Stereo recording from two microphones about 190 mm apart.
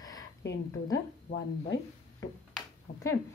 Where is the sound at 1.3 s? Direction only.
60° left (ahead or behind).